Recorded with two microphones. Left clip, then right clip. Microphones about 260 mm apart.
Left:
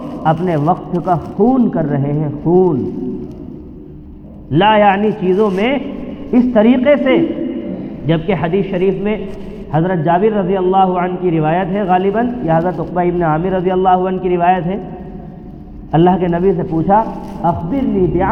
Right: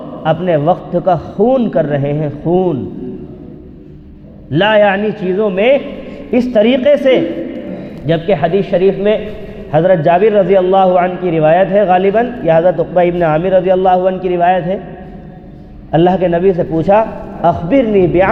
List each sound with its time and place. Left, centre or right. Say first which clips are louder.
0.2 s a man's voice: right 2 dB; right
4.5 s a man's voice: even; right
15.9 s a man's voice: right 2 dB; right